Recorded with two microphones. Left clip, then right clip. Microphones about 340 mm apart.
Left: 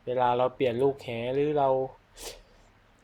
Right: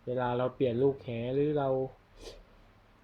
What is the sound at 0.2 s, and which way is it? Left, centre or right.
Speech, left.